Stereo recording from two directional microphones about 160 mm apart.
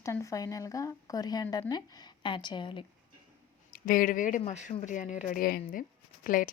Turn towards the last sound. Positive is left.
turn(degrees=60)  # may be behind; listen again after turning